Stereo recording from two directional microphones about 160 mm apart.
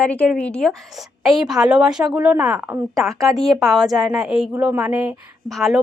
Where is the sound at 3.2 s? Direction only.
Centre (ahead or behind); by 5.1 s 20° right (ahead or behind).